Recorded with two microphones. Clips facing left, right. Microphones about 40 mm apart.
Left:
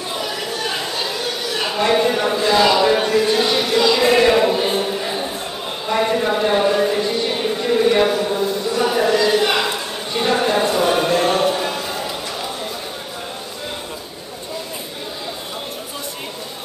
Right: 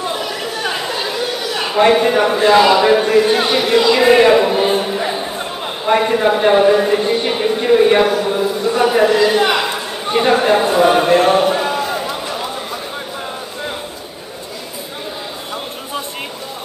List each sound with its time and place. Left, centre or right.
0.2 s chatter: centre
1.9 s speech: centre
2.6 s speech: centre
3.2 s speech: right
4.6 s music: centre
5.9 s speech: centre
7.0 s speech: right
8.0 s a man's voice: centre
8.3 s speech: centre
10.2 s a sound: centre